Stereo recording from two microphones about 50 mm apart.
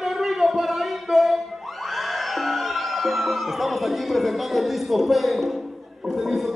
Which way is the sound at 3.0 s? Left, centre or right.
Centre.